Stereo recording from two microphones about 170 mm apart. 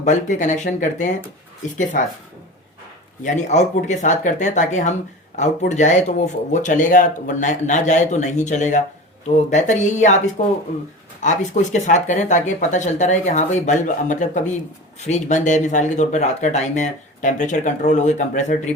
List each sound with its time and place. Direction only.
0.0 s speech: 45° left (ahead or behind)
3.2 s speech: 45° left (ahead or behind)
11.2 s speech: 45° left (ahead or behind)